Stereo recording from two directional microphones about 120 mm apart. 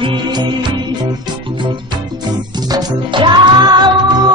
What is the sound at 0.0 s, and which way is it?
Music, 45° right (ahead or behind).